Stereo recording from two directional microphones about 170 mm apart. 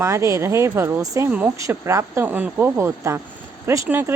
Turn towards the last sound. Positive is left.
turn(degrees=-15)  # may be behind; listen again after turning